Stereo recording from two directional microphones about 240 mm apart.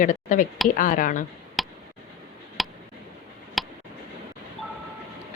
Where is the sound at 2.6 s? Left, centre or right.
Centre.